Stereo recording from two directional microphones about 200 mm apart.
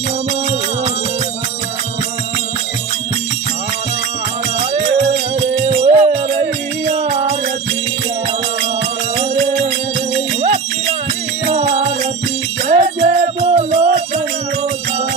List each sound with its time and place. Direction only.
4.7 s music: 40° right (ahead or behind)
9.1 s music: 35° right (ahead or behind)
11.4 s music: 35° right (ahead or behind)